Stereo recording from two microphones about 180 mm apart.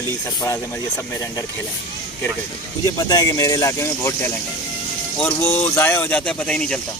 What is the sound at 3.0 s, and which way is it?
Speech, 20° left (ahead or behind).